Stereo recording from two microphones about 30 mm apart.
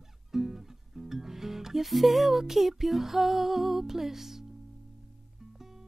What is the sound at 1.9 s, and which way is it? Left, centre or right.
Music, centre.